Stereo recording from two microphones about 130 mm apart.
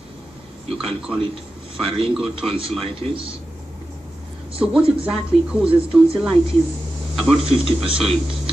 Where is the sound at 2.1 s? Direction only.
5° right (ahead or behind).